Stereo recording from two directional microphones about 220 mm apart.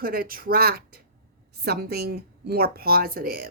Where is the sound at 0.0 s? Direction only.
40° right (ahead or behind).